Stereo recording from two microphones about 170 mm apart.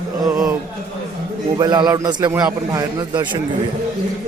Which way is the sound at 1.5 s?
25° right (ahead or behind).